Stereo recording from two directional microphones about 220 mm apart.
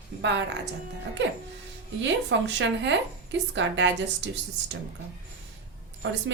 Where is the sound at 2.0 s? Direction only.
55° right (ahead or behind).